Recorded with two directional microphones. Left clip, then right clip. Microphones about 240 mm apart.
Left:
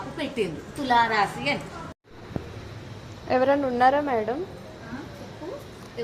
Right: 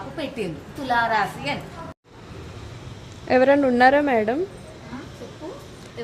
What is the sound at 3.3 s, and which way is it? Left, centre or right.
A woman's voice, right.